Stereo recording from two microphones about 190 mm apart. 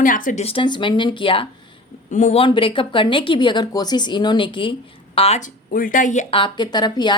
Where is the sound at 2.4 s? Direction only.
25° left (ahead or behind); by 6.2 s 40° left (ahead or behind).